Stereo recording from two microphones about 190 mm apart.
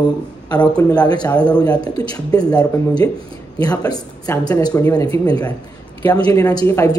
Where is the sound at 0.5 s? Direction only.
20° left (ahead or behind).